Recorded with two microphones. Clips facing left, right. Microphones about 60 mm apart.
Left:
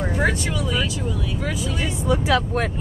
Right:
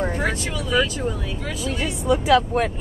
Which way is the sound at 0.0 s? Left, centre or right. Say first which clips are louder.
Left 1 dB; centre.